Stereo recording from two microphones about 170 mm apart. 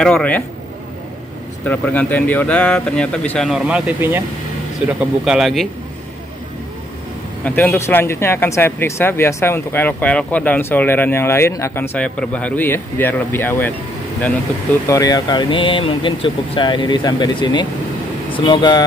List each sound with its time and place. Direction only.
0.0 s speech: 5° left (ahead or behind)
1.6 s speech: 10° left (ahead or behind)
7.4 s speech: 15° left (ahead or behind)
14.9 s speech: 20° left (ahead or behind)